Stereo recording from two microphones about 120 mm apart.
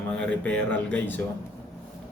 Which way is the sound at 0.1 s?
10° left (ahead or behind).